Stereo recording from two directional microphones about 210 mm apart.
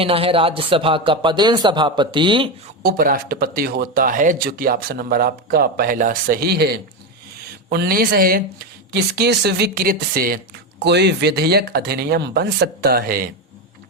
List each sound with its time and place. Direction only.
0.0 s speech: 25° right (ahead or behind)
2.8 s speech: 45° right (ahead or behind)